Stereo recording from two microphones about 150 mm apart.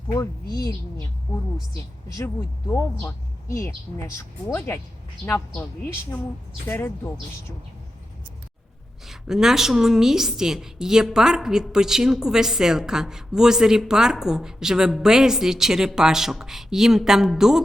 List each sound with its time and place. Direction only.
0.1 s a woman's voice: 25° left (ahead or behind)
2.1 s a woman's voice: 15° left (ahead or behind)
3.9 s a woman's voice: 20° left (ahead or behind)
6.7 s a woman's voice: 15° left (ahead or behind)
9.0 s a woman's voice: 5° right (ahead or behind)